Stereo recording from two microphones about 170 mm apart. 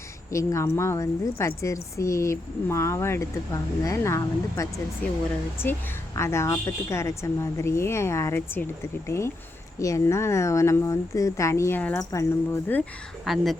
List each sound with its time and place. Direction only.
0.3 s a woman's voice: 15° left (ahead or behind); by 13.6 s centre (ahead or behind)